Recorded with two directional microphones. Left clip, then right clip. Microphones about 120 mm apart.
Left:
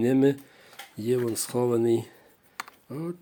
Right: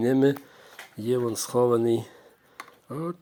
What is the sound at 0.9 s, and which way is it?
Speech, 10° left (ahead or behind).